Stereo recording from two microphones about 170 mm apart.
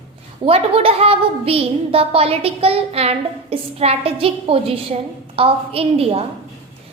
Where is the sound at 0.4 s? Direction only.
35° right (ahead or behind).